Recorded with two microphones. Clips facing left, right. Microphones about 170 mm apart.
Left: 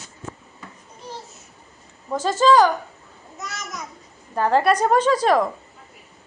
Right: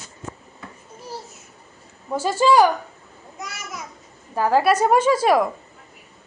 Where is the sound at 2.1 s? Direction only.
10° right (ahead or behind).